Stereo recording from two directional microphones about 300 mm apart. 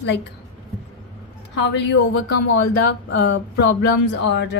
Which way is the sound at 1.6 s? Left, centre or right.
Left.